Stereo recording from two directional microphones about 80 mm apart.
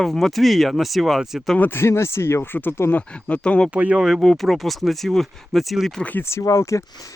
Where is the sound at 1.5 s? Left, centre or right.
Left.